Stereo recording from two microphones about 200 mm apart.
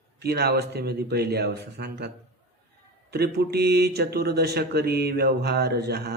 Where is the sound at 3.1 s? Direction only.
55° right (ahead or behind).